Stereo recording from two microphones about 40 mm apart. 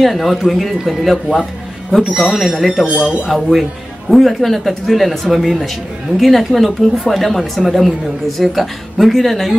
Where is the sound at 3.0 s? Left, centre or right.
Centre.